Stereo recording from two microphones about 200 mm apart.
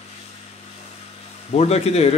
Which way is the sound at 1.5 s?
30° left (ahead or behind).